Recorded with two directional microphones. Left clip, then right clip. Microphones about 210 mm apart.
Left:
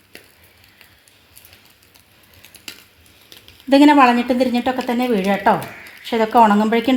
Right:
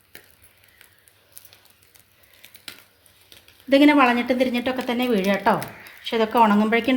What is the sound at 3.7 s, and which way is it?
A woman's voice, 35° left (ahead or behind).